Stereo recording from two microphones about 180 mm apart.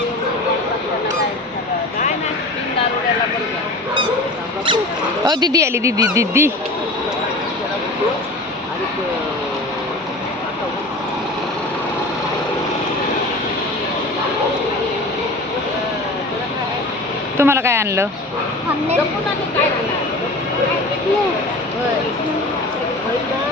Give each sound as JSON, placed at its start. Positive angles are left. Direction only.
{"t": 5.2, "sound": "speech", "side_deg": -20}
{"t": 17.3, "sound": "speech", "side_deg": -15}